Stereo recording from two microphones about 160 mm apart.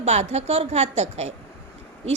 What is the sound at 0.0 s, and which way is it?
A woman's voice, 45° right (ahead or behind).